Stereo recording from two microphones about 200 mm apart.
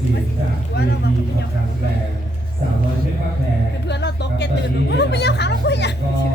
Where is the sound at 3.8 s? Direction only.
55° left (ahead or behind).